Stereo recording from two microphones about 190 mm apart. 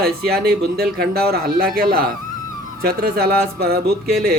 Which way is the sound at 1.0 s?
55° right (ahead or behind).